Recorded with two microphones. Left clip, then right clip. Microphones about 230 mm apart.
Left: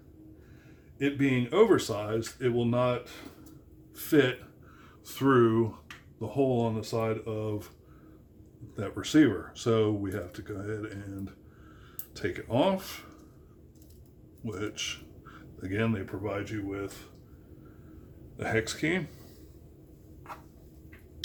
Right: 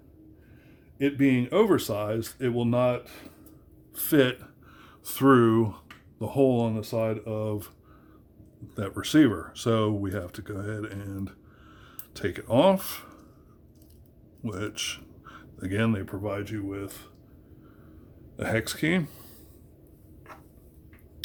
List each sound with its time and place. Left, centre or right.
0.9 s speech: right
8.7 s speech: right
14.4 s speech: right
18.3 s speech: right